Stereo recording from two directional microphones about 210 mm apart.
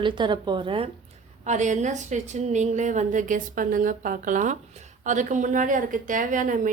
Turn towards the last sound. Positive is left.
turn(degrees=-40)  # may be behind; listen again after turning